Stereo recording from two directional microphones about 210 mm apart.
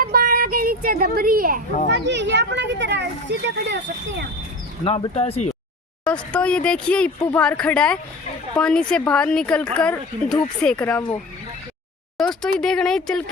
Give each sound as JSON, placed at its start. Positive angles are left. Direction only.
{"t": 0.0, "sound": "a sound", "side_deg": -45}
{"t": 1.9, "sound": "a child's voice", "side_deg": -55}
{"t": 4.9, "sound": "speech", "side_deg": 30}
{"t": 6.3, "sound": "speech", "side_deg": 5}
{"t": 12.1, "sound": "speech", "side_deg": 0}